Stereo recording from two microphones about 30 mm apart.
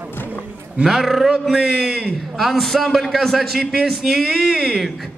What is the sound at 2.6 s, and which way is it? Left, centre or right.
Speech, centre.